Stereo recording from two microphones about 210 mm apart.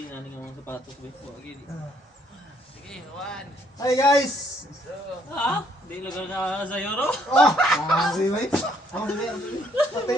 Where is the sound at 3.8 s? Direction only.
15° left (ahead or behind).